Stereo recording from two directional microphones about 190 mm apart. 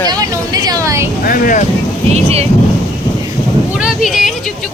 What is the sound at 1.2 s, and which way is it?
Speech, 45° left (ahead or behind).